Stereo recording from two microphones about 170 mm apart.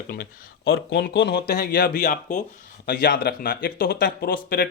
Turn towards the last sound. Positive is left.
turn(degrees=60)  # may be behind; listen again after turning